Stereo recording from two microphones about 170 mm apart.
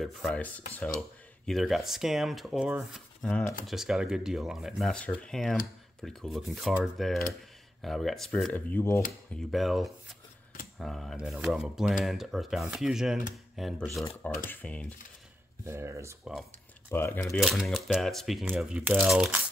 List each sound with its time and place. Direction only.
0.0 s speech: 5° left (ahead or behind)
9.3 s speech: centre (ahead or behind)
15.6 s speech: 15° right (ahead or behind)
16.9 s speech: 10° left (ahead or behind)
17.3 s speech: centre (ahead or behind)